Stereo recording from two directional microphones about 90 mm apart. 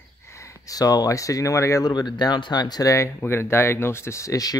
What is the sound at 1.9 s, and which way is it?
Speech, 55° left (ahead or behind).